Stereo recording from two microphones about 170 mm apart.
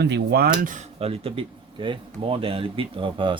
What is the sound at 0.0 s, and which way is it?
Speech, 70° right (ahead or behind).